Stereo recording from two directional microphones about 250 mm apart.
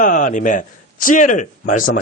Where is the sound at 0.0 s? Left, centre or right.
Left.